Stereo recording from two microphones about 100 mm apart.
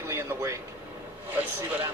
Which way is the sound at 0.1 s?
30° right (ahead or behind).